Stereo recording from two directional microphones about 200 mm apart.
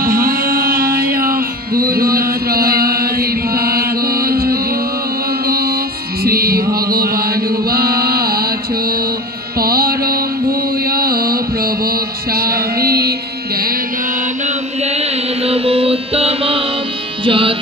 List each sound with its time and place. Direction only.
0.0 s music: 45° right (ahead or behind)
6.2 s mantra: 50° right (ahead or behind)
14.4 s mantra: 35° right (ahead or behind)
17.2 s music: 25° right (ahead or behind)